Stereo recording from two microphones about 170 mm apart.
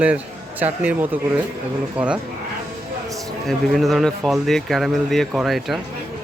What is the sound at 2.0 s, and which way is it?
Speech, 5° right (ahead or behind).